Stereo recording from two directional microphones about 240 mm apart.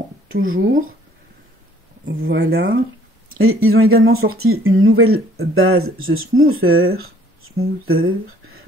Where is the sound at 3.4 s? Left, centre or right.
Right.